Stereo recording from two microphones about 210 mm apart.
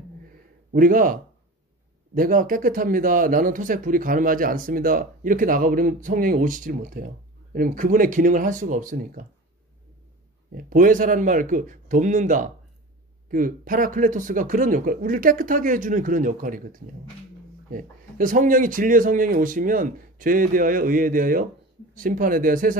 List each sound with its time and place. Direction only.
0.7 s speech: 40° right (ahead or behind)
10.5 s speech: 40° right (ahead or behind)